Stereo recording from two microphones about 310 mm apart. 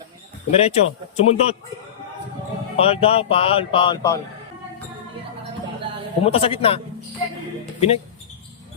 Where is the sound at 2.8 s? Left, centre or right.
Centre.